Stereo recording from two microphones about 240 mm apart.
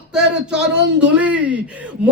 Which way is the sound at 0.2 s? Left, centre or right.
Right.